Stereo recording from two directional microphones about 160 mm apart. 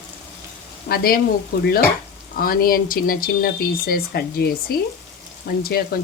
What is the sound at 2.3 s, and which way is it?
Speech, 65° left (ahead or behind).